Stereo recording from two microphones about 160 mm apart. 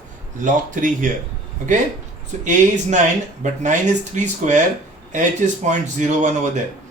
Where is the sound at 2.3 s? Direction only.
45° right (ahead or behind).